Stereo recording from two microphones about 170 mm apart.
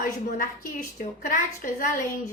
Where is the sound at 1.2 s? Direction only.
55° left (ahead or behind).